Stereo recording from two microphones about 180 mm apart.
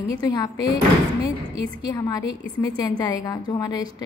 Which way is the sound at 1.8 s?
20° left (ahead or behind).